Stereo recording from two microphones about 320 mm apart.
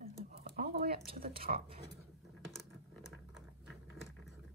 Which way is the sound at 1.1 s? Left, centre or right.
Right.